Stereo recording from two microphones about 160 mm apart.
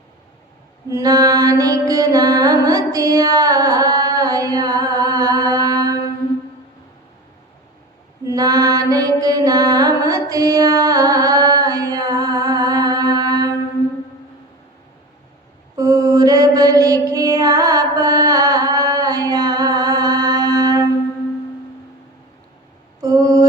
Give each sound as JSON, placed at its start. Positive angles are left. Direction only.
{"t": 0.9, "sound": "music", "side_deg": -20}
{"t": 8.3, "sound": "mantra", "side_deg": -25}
{"t": 15.7, "sound": "mantra", "side_deg": -20}
{"t": 23.0, "sound": "mantra", "side_deg": -20}